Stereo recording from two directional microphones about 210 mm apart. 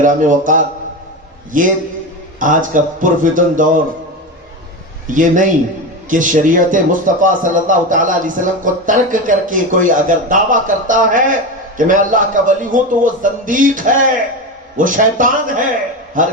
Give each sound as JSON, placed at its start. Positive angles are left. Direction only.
{"t": 0.0, "sound": "a man's voice", "side_deg": -40}
{"t": 5.1, "sound": "a man's voice", "side_deg": -40}